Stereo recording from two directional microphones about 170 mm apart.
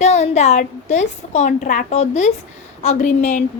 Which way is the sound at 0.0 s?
40° left (ahead or behind).